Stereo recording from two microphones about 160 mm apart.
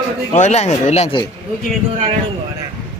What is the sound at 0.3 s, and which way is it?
Speech, 45° left (ahead or behind).